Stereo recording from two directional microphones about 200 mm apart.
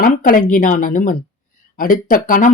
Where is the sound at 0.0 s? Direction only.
40° left (ahead or behind).